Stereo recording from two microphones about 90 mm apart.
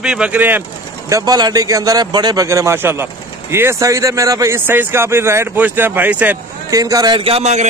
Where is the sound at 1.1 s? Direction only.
45° right (ahead or behind).